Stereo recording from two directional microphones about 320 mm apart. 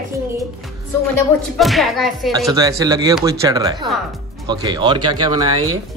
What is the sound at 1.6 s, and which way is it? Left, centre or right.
Speech, centre.